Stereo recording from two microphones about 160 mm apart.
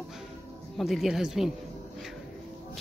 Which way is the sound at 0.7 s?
Centre (ahead or behind).